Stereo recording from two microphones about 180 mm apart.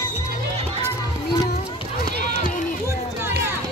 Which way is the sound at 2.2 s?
45° left (ahead or behind).